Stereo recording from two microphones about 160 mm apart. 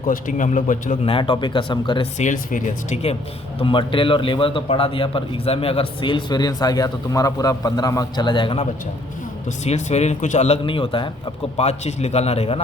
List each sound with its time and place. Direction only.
0.1 s speech: 55° left (ahead or behind)
1.0 s speech: 30° left (ahead or behind)
2.1 s speech: 50° left (ahead or behind)
3.6 s a man's voice: 30° left (ahead or behind)
9.6 s a man's voice: 45° left (ahead or behind)